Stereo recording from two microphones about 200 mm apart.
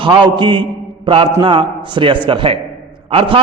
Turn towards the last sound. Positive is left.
turn(degrees=-30)  # may be behind; listen again after turning